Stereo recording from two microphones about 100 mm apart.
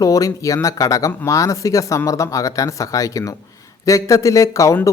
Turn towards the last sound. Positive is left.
turn(degrees=30)  # may be behind; listen again after turning